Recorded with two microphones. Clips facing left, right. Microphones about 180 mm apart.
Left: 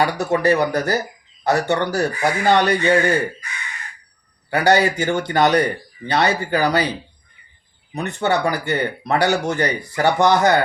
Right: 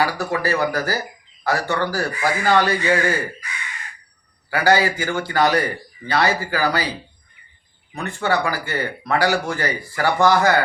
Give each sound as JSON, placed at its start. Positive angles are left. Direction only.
{"t": 0.0, "sound": "speech", "side_deg": 20}
{"t": 4.5, "sound": "speech", "side_deg": 20}
{"t": 7.9, "sound": "speech", "side_deg": 20}